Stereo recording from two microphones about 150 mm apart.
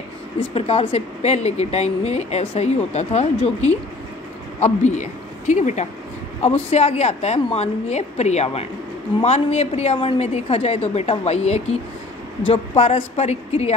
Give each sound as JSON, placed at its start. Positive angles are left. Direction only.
{"t": 0.6, "sound": "a woman's voice", "side_deg": 40}